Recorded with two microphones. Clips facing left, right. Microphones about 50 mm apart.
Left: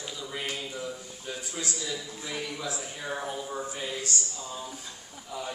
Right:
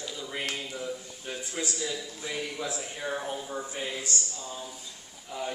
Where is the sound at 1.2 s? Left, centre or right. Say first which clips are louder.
Right 1 dB; right.